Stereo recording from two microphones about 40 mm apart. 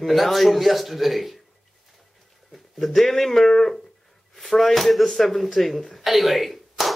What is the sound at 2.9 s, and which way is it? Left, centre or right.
Speech, centre.